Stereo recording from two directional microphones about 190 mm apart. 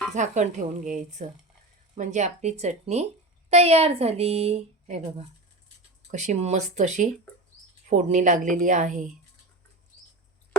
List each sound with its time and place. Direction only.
0.1 s a woman's voice: 40° right (ahead or behind)